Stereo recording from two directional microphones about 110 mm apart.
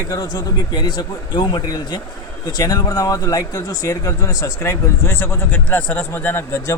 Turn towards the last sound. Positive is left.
turn(degrees=25)  # may be behind; listen again after turning